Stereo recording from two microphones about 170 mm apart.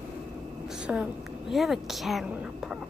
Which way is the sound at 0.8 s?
5° right (ahead or behind).